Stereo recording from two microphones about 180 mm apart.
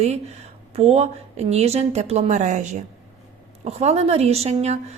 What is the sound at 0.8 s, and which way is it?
Speech, 35° right (ahead or behind).